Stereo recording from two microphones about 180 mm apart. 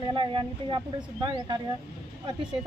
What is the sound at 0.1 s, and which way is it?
Speech, 25° right (ahead or behind).